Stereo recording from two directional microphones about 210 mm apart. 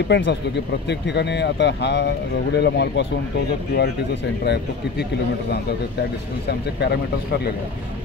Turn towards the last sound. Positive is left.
turn(degrees=50)  # may be behind; listen again after turning